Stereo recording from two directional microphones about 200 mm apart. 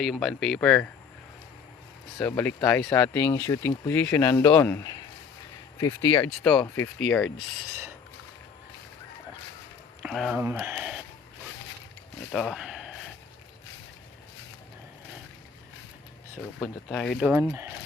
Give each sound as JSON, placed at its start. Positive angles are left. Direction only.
{"t": 0.0, "sound": "speech", "side_deg": 0}
{"t": 2.2, "sound": "speech", "side_deg": 10}
{"t": 6.4, "sound": "speech", "side_deg": 5}
{"t": 10.0, "sound": "speech", "side_deg": 0}
{"t": 12.3, "sound": "speech", "side_deg": 0}
{"t": 16.6, "sound": "speech", "side_deg": 5}
{"t": 17.2, "sound": "speech", "side_deg": -10}